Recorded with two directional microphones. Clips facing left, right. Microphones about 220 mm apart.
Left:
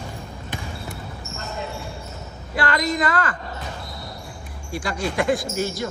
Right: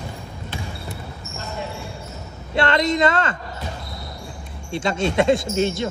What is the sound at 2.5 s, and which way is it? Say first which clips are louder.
Speech: right 4 dB; 25° right (ahead or behind).